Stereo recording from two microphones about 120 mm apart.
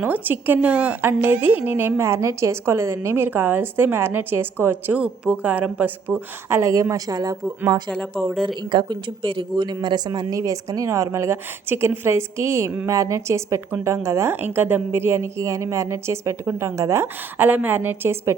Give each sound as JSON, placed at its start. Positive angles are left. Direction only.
{"t": 0.0, "sound": "a woman's voice", "side_deg": -15}
{"t": 8.7, "sound": "a woman's voice", "side_deg": -40}